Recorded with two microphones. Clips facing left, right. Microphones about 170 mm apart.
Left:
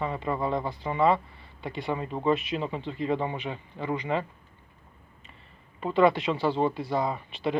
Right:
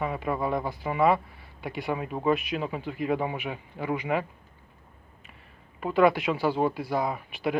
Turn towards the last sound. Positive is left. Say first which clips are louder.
# even
turn(degrees=-5)  # may be behind; listen again after turning